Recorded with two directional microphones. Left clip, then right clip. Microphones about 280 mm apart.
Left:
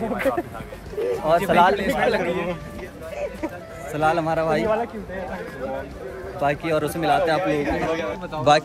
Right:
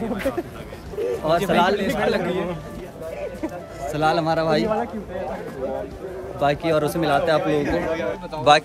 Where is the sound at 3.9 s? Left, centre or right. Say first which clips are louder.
Right 1 dB; centre.